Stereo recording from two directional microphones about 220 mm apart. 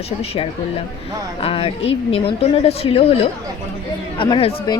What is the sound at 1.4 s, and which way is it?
A woman's voice, 25° left (ahead or behind).